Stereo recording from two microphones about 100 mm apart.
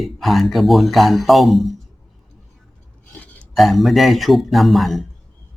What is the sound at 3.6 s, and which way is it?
Speech, centre (ahead or behind).